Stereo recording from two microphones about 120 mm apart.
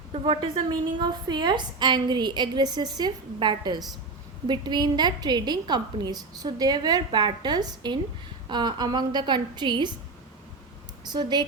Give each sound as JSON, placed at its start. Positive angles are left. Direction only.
{"t": 0.1, "sound": "a woman's voice", "side_deg": -50}
{"t": 0.9, "sound": "a woman's voice", "side_deg": -40}
{"t": 11.0, "sound": "a woman's voice", "side_deg": -35}